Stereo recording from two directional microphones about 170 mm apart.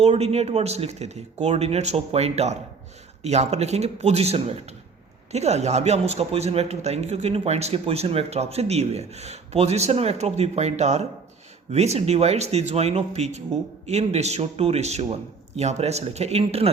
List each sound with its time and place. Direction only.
0.0 s a man's voice: 40° right (ahead or behind)